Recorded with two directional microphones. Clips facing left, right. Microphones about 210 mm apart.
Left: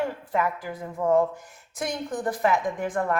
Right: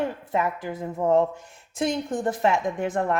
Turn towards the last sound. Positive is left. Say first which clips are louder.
# right 1 dB
turn(degrees=-25)  # may be behind; listen again after turning